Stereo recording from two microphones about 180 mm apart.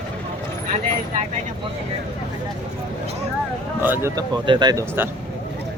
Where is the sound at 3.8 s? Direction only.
15° right (ahead or behind).